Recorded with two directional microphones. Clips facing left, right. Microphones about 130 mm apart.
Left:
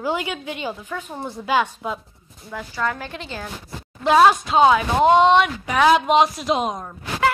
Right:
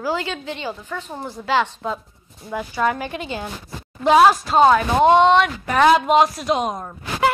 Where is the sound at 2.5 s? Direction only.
15° right (ahead or behind).